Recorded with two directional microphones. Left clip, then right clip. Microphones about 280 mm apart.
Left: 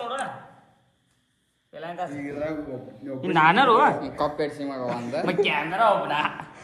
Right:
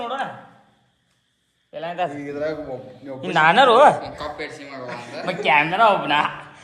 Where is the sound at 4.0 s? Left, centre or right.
Centre.